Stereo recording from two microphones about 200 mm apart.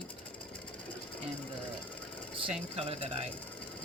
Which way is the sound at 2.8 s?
30° right (ahead or behind).